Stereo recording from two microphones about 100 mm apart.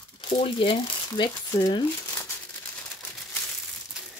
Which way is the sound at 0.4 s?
60° left (ahead or behind).